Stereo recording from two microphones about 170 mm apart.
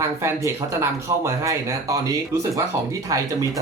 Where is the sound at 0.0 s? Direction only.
15° right (ahead or behind).